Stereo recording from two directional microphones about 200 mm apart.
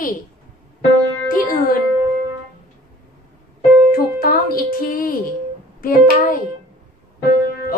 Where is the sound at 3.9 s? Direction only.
45° left (ahead or behind).